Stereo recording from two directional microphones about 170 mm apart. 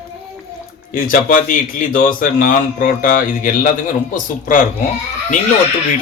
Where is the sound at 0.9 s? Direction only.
55° left (ahead or behind).